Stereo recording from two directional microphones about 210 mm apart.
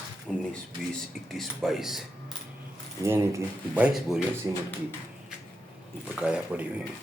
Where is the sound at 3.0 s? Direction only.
15° right (ahead or behind).